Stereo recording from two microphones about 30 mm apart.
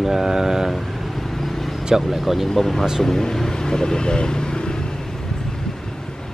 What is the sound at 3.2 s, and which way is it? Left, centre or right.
Speech, centre.